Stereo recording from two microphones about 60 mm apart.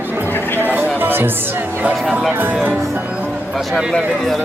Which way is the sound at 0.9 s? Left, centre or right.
Right.